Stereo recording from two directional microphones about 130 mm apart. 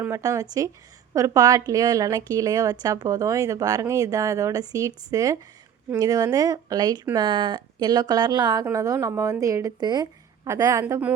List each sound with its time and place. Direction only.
0.0 s speech: 25° right (ahead or behind)